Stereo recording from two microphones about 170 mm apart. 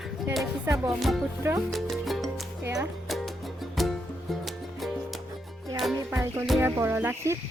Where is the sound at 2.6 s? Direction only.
15° right (ahead or behind).